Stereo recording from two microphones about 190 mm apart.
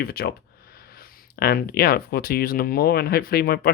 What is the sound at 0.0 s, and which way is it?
Speech, 55° left (ahead or behind).